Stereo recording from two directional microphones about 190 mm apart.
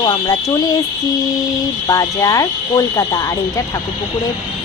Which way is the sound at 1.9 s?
15° left (ahead or behind).